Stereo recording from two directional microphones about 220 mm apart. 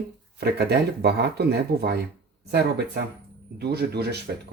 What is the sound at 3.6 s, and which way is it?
Speech, 45° right (ahead or behind).